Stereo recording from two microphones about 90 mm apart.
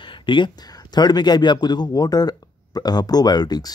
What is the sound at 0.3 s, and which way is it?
Speech, 65° left (ahead or behind).